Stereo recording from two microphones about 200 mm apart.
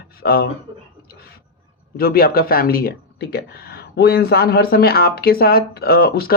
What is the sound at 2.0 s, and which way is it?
Speech, 50° left (ahead or behind).